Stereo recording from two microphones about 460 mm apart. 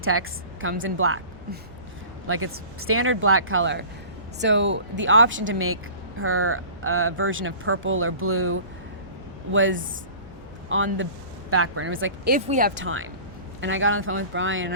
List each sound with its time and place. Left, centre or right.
0.0 s speech: right
2.2 s speech: right